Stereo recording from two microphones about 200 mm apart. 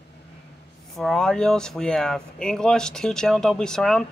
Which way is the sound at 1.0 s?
Centre (ahead or behind).